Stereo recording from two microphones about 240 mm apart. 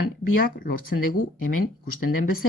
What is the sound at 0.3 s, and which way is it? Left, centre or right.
Speech, left.